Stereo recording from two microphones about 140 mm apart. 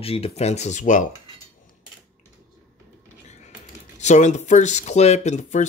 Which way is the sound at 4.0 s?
55° left (ahead or behind).